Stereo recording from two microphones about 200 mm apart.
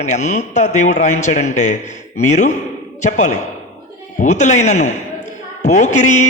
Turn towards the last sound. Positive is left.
turn(degrees=35)  # may be behind; listen again after turning